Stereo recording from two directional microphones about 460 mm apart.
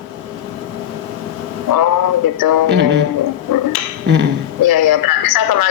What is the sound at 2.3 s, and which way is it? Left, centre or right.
Speech, left.